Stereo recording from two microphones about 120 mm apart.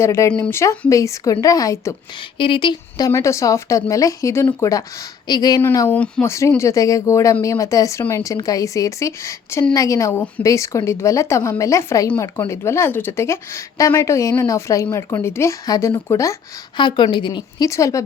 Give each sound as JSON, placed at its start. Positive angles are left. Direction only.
{"t": 0.0, "sound": "speech", "side_deg": 25}
{"t": 2.4, "sound": "speech", "side_deg": 45}
{"t": 3.1, "sound": "a woman's voice", "side_deg": 25}
{"t": 5.9, "sound": "speech", "side_deg": 10}
{"t": 6.6, "sound": "speech", "side_deg": 25}
{"t": 16.7, "sound": "a woman's voice", "side_deg": 40}
{"t": 17.7, "sound": "speech", "side_deg": 25}